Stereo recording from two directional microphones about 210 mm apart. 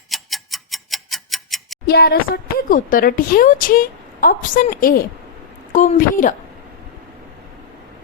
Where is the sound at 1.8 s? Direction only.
50° left (ahead or behind).